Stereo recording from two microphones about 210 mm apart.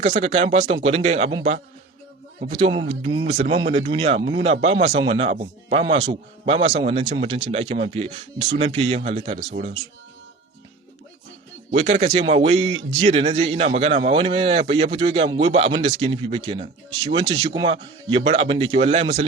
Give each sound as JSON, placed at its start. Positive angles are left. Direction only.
{"t": 0.0, "sound": "speech", "side_deg": -30}
{"t": 2.6, "sound": "speech", "side_deg": -30}
{"t": 3.2, "sound": "speech", "side_deg": -40}
{"t": 3.5, "sound": "speech", "side_deg": -25}
{"t": 11.7, "sound": "speech", "side_deg": -35}